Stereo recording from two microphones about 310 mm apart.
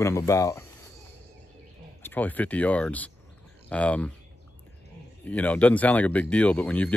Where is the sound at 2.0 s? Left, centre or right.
Centre.